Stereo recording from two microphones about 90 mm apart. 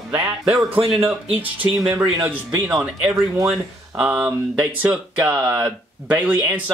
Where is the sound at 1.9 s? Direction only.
30° right (ahead or behind).